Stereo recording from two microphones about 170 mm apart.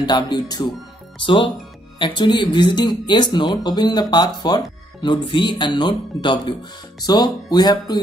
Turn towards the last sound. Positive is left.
turn(degrees=25)  # may be behind; listen again after turning